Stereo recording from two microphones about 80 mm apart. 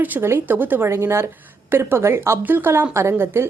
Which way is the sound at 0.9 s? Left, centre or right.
Right.